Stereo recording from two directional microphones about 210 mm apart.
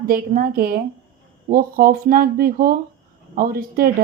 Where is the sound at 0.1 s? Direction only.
45° right (ahead or behind).